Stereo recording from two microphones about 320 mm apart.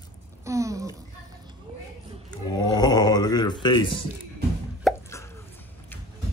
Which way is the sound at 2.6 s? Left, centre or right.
Centre.